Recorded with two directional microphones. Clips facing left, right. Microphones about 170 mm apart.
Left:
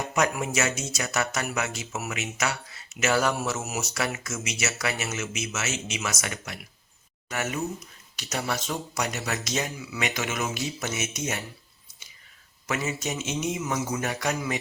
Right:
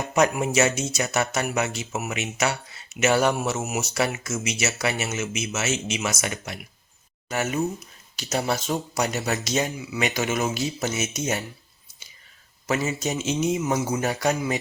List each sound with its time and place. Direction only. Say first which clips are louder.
0.1 s speech: right 6 dB; 25° right (ahead or behind)
12.6 s a man's voice: right 4 dB; 30° right (ahead or behind)